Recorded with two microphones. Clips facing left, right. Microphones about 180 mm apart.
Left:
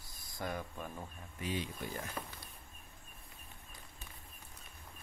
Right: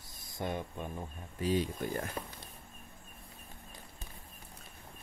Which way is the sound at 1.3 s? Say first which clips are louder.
Right 8 dB; 40° right (ahead or behind).